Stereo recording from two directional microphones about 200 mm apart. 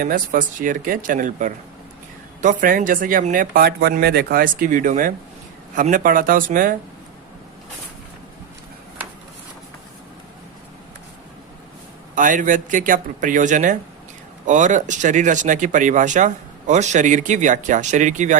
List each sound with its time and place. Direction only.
0.0 s speech: 45° right (ahead or behind)
12.1 s speech: 40° right (ahead or behind)